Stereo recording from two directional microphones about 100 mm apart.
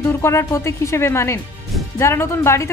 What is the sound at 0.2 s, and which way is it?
Speech, 30° left (ahead or behind).